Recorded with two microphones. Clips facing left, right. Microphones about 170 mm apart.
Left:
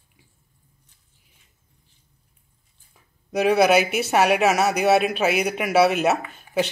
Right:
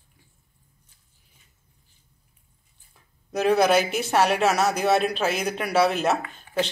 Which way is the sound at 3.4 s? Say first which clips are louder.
Left 2 dB; 5° left (ahead or behind).